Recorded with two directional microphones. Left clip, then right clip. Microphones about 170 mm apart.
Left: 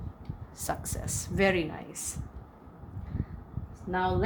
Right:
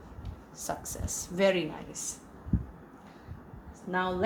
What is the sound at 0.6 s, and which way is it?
Speech, 50° left (ahead or behind).